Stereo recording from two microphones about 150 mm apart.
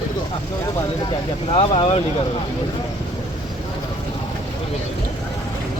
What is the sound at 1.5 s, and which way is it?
Speech, 40° left (ahead or behind).